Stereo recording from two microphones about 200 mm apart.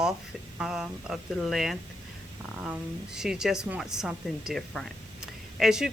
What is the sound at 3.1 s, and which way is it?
A woman's voice, 5° right (ahead or behind).